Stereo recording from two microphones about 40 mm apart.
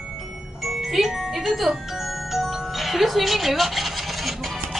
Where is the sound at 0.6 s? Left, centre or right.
Centre.